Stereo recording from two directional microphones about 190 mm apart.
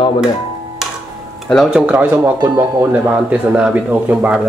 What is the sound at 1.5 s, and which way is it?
Speech, centre (ahead or behind).